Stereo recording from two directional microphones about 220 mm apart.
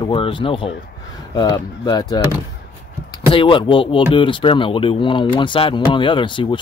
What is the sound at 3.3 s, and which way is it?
Speech, 20° left (ahead or behind).